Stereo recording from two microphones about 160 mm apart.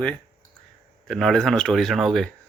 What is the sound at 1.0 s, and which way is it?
Speech, centre (ahead or behind).